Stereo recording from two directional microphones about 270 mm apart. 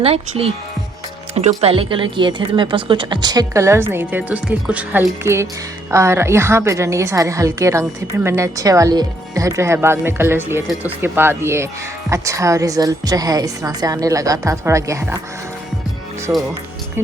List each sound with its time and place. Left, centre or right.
0.0 s a woman's voice: right
16.3 s a woman's voice: centre